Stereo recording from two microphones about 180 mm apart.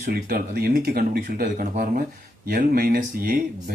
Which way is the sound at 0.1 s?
55° right (ahead or behind).